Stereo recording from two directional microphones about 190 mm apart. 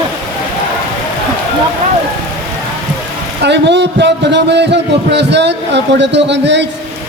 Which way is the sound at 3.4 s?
65° right (ahead or behind).